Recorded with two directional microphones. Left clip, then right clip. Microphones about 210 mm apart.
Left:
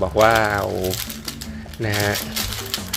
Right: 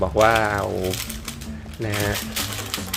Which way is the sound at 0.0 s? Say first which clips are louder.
Left 2 dB; 5° left (ahead or behind).